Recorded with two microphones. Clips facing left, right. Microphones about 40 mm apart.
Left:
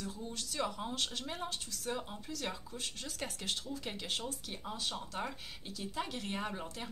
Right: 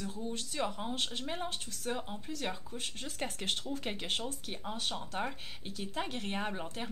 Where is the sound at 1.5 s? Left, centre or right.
Right.